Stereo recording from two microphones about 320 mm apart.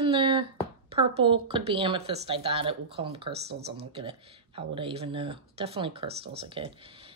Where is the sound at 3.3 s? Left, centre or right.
Right.